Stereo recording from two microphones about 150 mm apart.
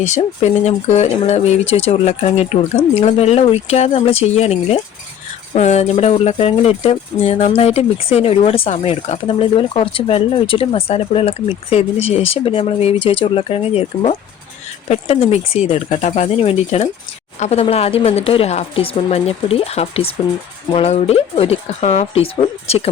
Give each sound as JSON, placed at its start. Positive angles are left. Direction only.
{"t": 0.0, "sound": "speech", "side_deg": 50}